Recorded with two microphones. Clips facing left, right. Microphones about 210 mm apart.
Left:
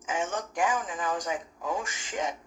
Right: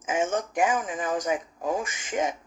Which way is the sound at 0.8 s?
55° right (ahead or behind).